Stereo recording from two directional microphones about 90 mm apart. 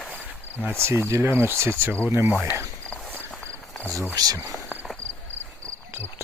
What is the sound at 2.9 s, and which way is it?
Walk, 10° left (ahead or behind).